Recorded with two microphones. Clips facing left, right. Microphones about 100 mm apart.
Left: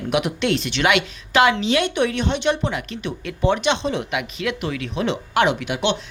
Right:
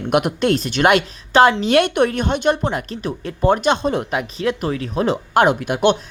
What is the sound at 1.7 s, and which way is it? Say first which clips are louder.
A woman's voice: right 4 dB; 55° right (ahead or behind).